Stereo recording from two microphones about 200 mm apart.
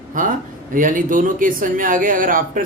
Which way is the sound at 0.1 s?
40° right (ahead or behind).